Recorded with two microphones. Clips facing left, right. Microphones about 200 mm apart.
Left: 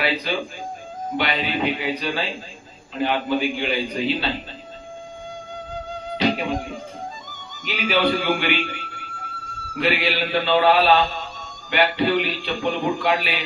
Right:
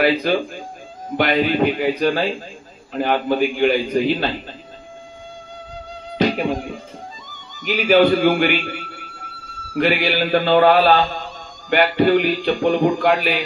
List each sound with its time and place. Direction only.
0.0 s music: 50° right (ahead or behind)
6.2 s music: 50° right (ahead or behind)
7.6 s music: 50° right (ahead or behind)
9.8 s music: 50° right (ahead or behind)